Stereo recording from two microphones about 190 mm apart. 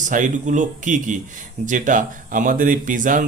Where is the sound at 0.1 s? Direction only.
40° right (ahead or behind).